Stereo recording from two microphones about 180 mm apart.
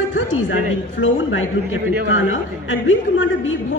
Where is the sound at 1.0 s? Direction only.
90° left.